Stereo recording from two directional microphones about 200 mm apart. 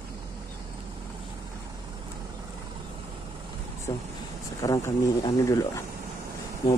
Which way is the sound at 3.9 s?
15° left (ahead or behind).